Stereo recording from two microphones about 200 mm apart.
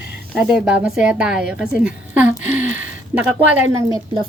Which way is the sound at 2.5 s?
40° left (ahead or behind).